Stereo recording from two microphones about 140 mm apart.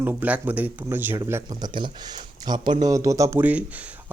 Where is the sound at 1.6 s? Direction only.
30° right (ahead or behind).